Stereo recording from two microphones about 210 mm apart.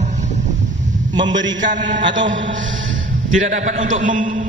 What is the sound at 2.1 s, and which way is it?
Speech, 60° right (ahead or behind).